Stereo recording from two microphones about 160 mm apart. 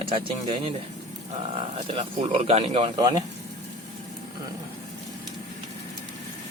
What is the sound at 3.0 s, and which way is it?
Speech, 25° right (ahead or behind).